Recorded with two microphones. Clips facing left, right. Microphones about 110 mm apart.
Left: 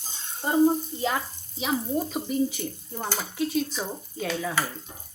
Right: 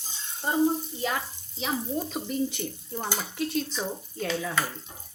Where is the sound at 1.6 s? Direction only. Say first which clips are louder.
Left 3 dB; 10° left (ahead or behind).